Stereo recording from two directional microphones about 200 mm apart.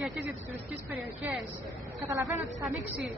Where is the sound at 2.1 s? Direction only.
15° right (ahead or behind).